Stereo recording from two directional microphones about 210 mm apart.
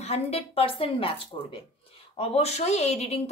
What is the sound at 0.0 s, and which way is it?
Speech, 30° left (ahead or behind).